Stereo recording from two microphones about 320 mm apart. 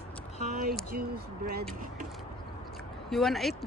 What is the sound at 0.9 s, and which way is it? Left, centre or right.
Speech, right.